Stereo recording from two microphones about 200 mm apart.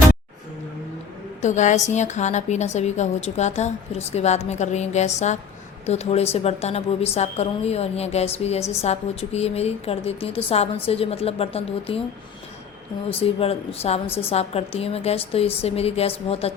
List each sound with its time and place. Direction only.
1.4 s a woman's voice: 35° left (ahead or behind)
13.1 s a woman's voice: 30° left (ahead or behind)